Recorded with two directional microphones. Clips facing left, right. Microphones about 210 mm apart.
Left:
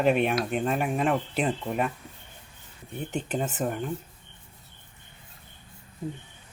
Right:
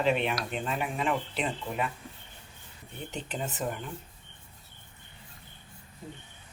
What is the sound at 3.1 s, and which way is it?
Speech, 45° left (ahead or behind).